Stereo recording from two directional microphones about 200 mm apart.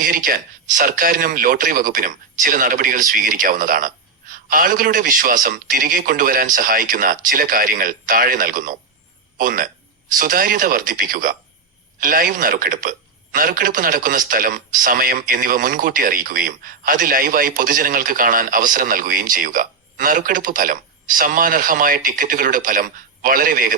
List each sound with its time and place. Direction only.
0.0 s speech: 45° right (ahead or behind)